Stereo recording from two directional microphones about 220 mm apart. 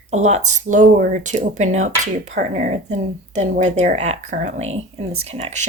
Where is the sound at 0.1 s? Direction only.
30° right (ahead or behind).